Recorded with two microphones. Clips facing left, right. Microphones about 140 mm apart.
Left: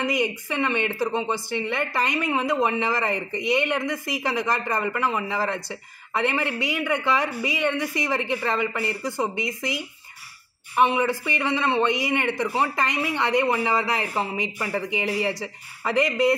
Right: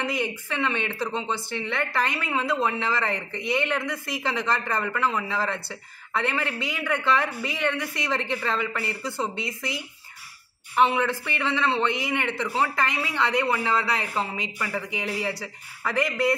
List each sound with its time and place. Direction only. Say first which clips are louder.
0.0 s speech: left 3 dB; 15° left (ahead or behind)
10.8 s speech: left 1 dB; 15° left (ahead or behind)